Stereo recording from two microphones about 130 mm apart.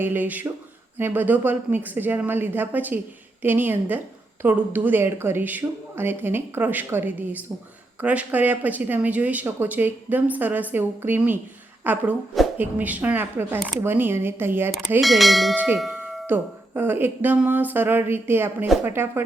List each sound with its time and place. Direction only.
0.0 s speech: 15° right (ahead or behind)
15.0 s bell: centre (ahead or behind)
15.5 s speech: 10° right (ahead or behind)